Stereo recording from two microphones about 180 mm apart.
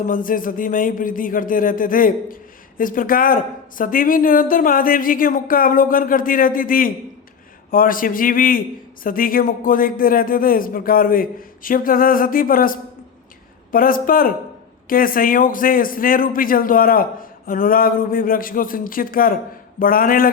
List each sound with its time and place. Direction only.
0.0 s a man's voice: 50° left (ahead or behind)